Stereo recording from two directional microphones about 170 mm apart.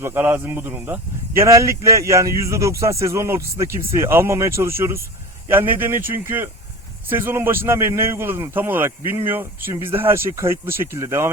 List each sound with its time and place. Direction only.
0.0 s speech: 15° right (ahead or behind)